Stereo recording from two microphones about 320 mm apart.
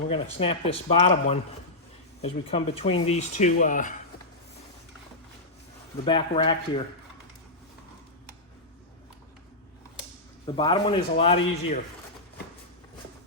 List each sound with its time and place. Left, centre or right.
0.1 s a man's voice: centre
6.1 s a man's voice: centre
10.4 s a man's voice: centre